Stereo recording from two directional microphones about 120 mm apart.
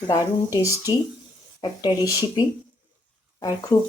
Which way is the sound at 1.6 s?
35° left (ahead or behind).